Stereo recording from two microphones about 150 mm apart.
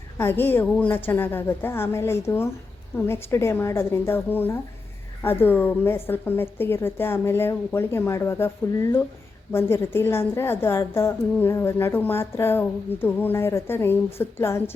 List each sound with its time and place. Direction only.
0.2 s a woman's voice: 15° left (ahead or behind)